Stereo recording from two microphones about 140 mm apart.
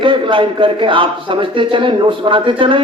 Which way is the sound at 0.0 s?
35° right (ahead or behind).